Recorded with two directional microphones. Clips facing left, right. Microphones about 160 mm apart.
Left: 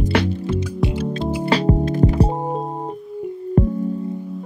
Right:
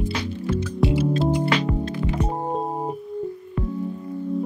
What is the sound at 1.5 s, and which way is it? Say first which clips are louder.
Music: left 5 dB; 35° left (ahead or behind).